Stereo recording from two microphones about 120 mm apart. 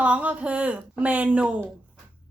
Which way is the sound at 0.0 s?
10° right (ahead or behind).